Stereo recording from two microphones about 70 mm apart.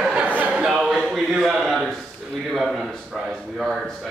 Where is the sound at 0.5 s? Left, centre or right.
Centre.